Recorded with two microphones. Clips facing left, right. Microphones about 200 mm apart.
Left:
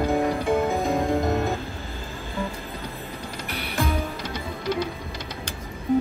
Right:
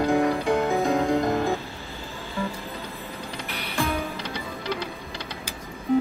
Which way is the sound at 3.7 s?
Centre (ahead or behind).